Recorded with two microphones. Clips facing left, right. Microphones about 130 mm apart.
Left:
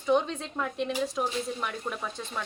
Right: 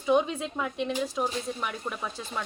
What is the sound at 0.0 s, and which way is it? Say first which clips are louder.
Speech: right 1 dB; 10° right (ahead or behind).